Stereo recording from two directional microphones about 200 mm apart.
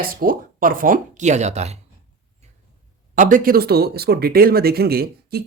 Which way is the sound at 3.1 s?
45° right (ahead or behind).